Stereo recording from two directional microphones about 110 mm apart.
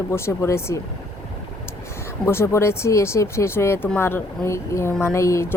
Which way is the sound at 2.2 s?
25° left (ahead or behind).